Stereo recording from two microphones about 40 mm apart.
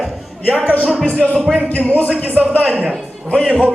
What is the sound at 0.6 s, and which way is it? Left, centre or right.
Speech, left.